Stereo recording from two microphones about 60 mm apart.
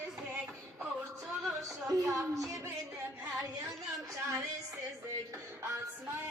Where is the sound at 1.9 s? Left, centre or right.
Right.